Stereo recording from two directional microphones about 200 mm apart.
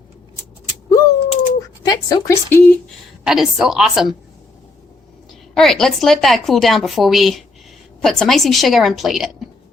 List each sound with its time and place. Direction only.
0.9 s a sound: 15° left (ahead or behind)
1.8 s a woman's voice: 20° left (ahead or behind)
3.2 s a woman's voice: centre (ahead or behind)
5.5 s a woman's voice: centre (ahead or behind)